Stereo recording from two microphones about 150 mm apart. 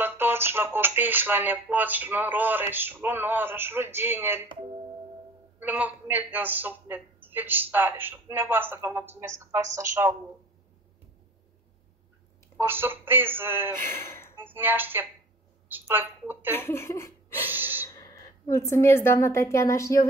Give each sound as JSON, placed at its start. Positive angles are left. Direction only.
{"t": 0.0, "sound": "a woman's voice", "side_deg": -15}
{"t": 5.6, "sound": "a woman's voice", "side_deg": -10}
{"t": 12.5, "sound": "a woman's voice", "side_deg": -15}
{"t": 13.7, "sound": "speech", "side_deg": 15}
{"t": 14.3, "sound": "a woman's voice", "side_deg": -15}
{"t": 16.5, "sound": "speech", "side_deg": 15}
{"t": 17.5, "sound": "gasp", "side_deg": -10}
{"t": 17.8, "sound": "a woman's voice", "side_deg": 20}